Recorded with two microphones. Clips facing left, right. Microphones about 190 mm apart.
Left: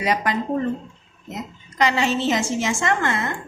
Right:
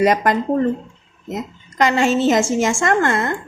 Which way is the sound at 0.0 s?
45° right (ahead or behind).